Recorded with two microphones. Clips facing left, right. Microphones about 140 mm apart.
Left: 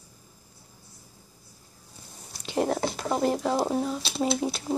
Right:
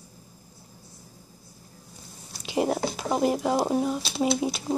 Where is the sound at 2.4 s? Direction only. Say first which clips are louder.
Right 1 dB; 10° right (ahead or behind).